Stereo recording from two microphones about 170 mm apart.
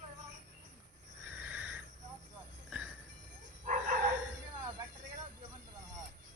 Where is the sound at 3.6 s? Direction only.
50° right (ahead or behind).